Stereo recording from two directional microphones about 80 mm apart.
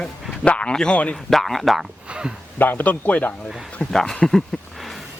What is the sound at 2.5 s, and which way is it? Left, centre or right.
Speech, left.